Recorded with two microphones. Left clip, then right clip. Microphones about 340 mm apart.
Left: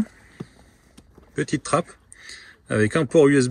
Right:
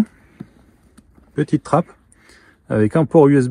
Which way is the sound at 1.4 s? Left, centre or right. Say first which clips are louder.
Right 5 dB; centre.